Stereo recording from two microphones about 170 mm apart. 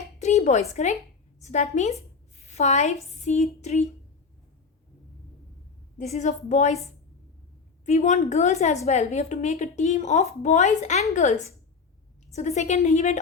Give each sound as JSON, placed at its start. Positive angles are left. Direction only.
{"t": 0.2, "sound": "a sound", "side_deg": 40}
{"t": 0.7, "sound": "a woman's voice", "side_deg": 40}
{"t": 6.0, "sound": "a woman's voice", "side_deg": 45}
{"t": 7.9, "sound": "a woman's voice", "side_deg": 45}